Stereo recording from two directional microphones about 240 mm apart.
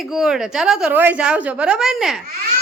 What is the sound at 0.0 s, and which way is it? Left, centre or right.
A woman's voice, centre.